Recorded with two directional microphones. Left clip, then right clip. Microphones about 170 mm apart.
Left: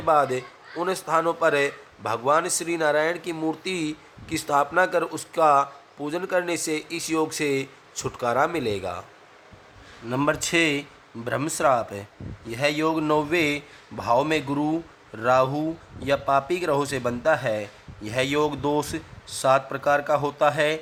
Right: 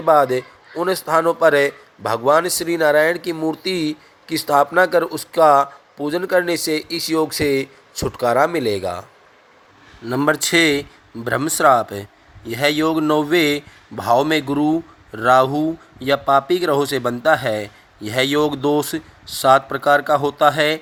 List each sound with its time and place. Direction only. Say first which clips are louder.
0.0 s speech: right 6 dB; 25° right (ahead or behind)
10.1 s speech: right 6 dB; 30° right (ahead or behind)